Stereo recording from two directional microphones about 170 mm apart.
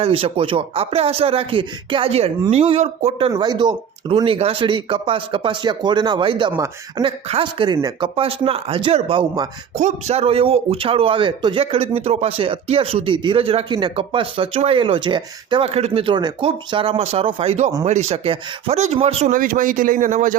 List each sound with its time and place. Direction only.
0.0 s a man's voice: 35° right (ahead or behind)
3.3 s a man's voice: 25° right (ahead or behind)
9.7 s a man's voice: 40° right (ahead or behind)
19.3 s speech: 55° right (ahead or behind)